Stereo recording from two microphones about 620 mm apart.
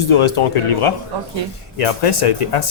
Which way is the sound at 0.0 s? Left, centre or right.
Left.